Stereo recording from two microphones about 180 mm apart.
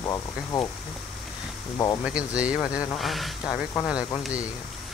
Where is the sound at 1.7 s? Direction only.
20° left (ahead or behind).